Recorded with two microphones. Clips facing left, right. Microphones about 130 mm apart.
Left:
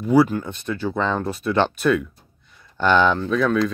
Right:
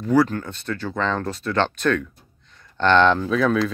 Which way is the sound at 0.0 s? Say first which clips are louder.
Left 2 dB; 10° left (ahead or behind).